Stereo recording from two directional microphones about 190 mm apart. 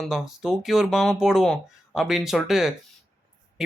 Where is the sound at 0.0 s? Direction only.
Centre (ahead or behind).